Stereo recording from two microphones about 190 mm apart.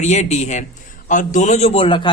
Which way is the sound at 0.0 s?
35° left (ahead or behind).